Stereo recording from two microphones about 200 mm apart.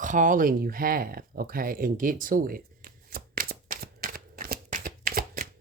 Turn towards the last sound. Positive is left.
turn(degrees=-45)  # may be behind; listen again after turning